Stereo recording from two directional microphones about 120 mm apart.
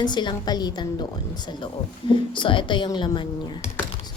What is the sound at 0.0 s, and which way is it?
A child's voice, 40° left (ahead or behind).